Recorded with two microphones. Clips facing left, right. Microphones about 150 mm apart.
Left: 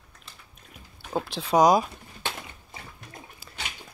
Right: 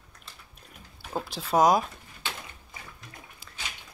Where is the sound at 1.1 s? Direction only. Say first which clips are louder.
Left 3 dB; 5° right (ahead or behind).